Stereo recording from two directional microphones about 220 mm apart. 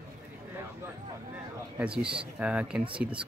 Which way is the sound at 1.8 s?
5° right (ahead or behind).